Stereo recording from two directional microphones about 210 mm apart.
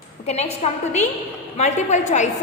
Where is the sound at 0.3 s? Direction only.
30° left (ahead or behind).